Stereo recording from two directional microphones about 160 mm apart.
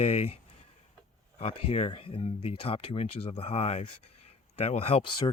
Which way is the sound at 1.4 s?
35° left (ahead or behind).